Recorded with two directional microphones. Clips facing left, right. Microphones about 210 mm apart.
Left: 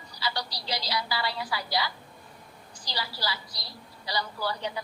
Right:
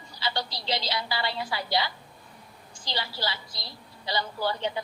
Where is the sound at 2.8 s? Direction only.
25° right (ahead or behind).